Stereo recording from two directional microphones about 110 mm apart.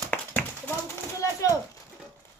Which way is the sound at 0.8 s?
30° left (ahead or behind).